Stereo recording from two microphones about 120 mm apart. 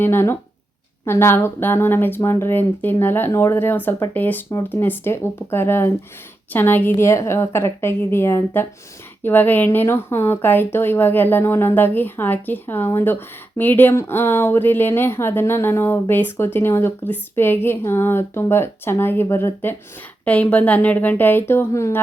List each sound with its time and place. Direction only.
0.0 s speech: 20° left (ahead or behind)